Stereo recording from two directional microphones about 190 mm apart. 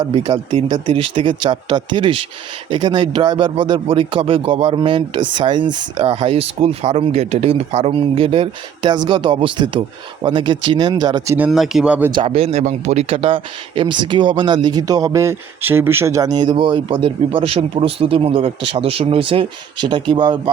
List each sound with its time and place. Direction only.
0.0 s a man's voice: 25° right (ahead or behind)
11.3 s speech: 5° right (ahead or behind)
12.1 s a man's voice: 30° right (ahead or behind)